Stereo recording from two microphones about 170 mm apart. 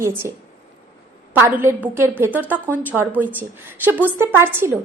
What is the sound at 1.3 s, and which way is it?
A woman's voice, 15° right (ahead or behind).